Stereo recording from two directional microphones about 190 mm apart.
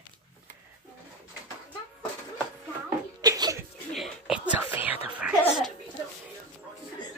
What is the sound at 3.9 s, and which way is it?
Whispering, 5° right (ahead or behind).